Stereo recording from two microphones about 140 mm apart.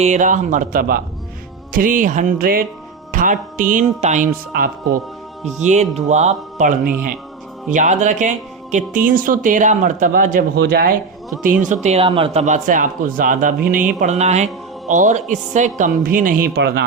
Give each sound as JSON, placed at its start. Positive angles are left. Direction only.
{"t": 0.0, "sound": "speech", "side_deg": -60}
{"t": 1.7, "sound": "speech", "side_deg": -70}
{"t": 3.1, "sound": "speech", "side_deg": -70}
{"t": 4.5, "sound": "speech", "side_deg": -90}
{"t": 5.5, "sound": "speech", "side_deg": -55}
{"t": 7.7, "sound": "speech", "side_deg": -60}
{"t": 11.6, "sound": "speech", "side_deg": -60}